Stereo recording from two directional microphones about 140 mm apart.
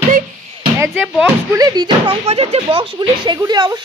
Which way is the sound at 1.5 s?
25° right (ahead or behind).